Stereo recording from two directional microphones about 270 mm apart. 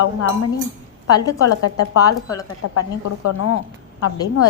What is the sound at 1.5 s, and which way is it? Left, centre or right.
A woman's voice, left.